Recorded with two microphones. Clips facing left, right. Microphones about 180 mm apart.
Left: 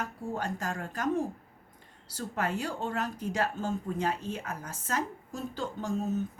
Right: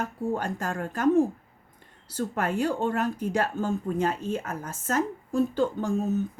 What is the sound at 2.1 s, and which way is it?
Speech, 50° right (ahead or behind).